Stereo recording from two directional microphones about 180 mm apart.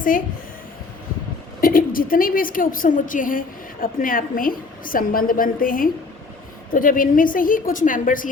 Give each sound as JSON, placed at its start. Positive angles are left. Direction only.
{"t": 1.6, "sound": "a woman's voice", "side_deg": 50}